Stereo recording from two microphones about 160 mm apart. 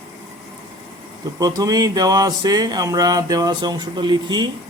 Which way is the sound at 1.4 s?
25° right (ahead or behind).